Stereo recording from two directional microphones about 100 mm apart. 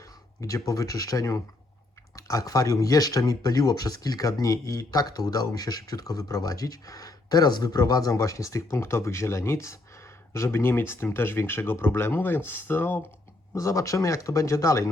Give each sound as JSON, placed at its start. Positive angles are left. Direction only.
{"t": 0.4, "sound": "speech", "side_deg": 35}